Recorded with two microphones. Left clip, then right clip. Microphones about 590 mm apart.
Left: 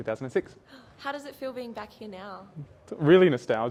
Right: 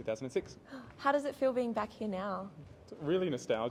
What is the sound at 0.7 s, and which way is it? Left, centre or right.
A woman's voice, right.